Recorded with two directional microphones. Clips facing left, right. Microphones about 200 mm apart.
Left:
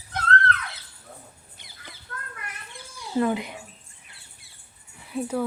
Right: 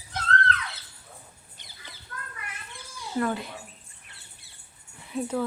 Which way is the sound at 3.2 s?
15° left (ahead or behind).